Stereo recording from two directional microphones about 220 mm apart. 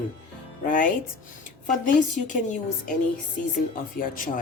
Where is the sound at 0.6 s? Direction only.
40° left (ahead or behind).